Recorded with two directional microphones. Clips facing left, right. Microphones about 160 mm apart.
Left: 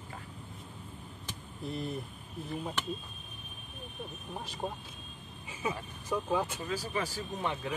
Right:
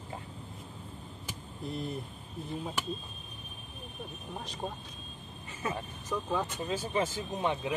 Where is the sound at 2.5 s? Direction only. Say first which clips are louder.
Even; centre (ahead or behind).